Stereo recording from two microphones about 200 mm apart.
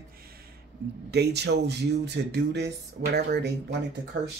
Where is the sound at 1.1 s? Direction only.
55° right (ahead or behind).